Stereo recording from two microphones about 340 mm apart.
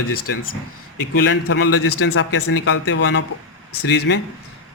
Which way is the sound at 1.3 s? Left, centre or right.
Left.